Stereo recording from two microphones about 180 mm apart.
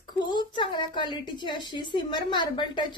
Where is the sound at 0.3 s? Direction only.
25° left (ahead or behind).